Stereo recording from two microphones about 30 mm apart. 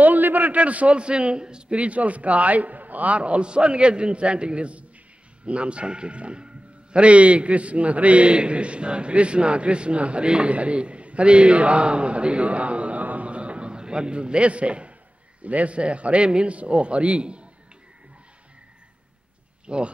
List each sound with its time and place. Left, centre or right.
0.0 s a sound: right
0.6 s a man's voice: right
0.9 s a man's voice: right
1.8 s a man's voice: right
3.2 s a man's voice: right
10.2 s a man's voice: right
10.5 s a man's voice: right
13.0 s a sound: right
13.3 s a sound: right
15.4 s a man's voice: right
19.6 s speech: right